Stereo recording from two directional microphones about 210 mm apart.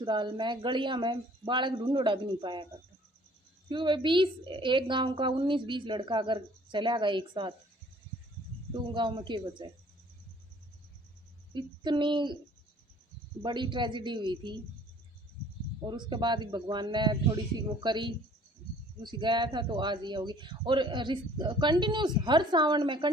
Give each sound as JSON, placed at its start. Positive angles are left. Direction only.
{"t": 0.0, "sound": "speech", "side_deg": -20}
{"t": 3.7, "sound": "speech", "side_deg": -20}
{"t": 8.7, "sound": "speech", "side_deg": -25}
{"t": 11.5, "sound": "speech", "side_deg": -20}
{"t": 13.4, "sound": "speech", "side_deg": -20}
{"t": 15.8, "sound": "speech", "side_deg": -20}